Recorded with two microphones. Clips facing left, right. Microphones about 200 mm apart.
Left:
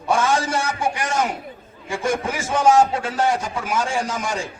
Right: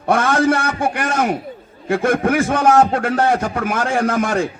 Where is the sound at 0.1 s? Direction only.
60° right (ahead or behind).